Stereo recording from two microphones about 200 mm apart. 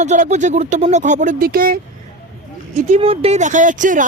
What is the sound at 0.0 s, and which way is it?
A woman's voice, 35° right (ahead or behind).